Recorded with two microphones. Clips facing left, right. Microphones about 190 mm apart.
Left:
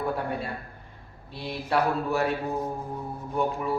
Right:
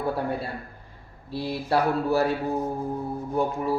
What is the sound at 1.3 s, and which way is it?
Speech, 35° right (ahead or behind).